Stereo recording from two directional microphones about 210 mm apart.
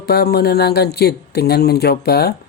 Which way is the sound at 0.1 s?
50° left (ahead or behind).